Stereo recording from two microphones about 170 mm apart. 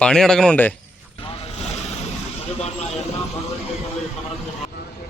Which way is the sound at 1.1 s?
35° left (ahead or behind).